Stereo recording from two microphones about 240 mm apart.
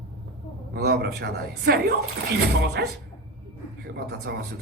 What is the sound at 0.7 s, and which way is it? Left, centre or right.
Speech, right.